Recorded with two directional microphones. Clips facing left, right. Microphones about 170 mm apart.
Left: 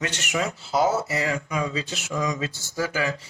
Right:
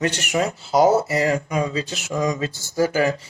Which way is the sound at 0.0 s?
35° right (ahead or behind).